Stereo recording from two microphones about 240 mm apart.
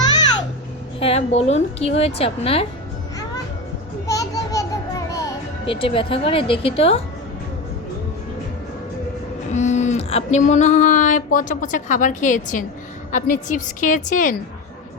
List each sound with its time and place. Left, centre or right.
0.9 s a woman's voice: left
4.0 s music: centre
9.5 s a sound: left